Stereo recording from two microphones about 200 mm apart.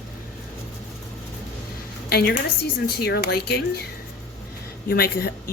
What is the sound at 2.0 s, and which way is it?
A woman's voice, 50° left (ahead or behind).